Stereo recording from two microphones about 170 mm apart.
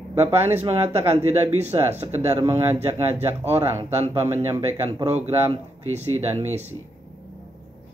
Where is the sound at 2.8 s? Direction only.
15° right (ahead or behind).